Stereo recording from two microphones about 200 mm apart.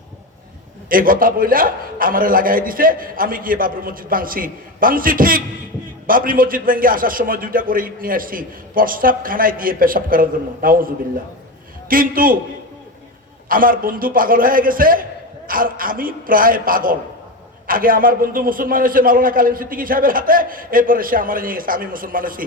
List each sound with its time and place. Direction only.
0.9 s a man's voice: 45° right (ahead or behind)
13.5 s a man's voice: 45° right (ahead or behind)